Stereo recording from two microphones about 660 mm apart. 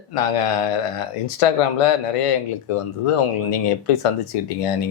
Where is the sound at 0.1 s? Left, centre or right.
Left.